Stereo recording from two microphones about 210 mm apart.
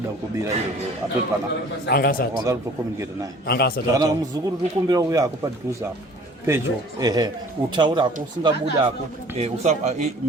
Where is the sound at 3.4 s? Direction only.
50° left (ahead or behind).